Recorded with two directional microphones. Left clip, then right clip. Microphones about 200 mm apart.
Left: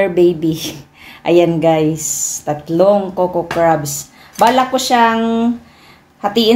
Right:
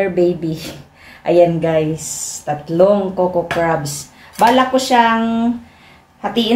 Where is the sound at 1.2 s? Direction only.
45° left (ahead or behind).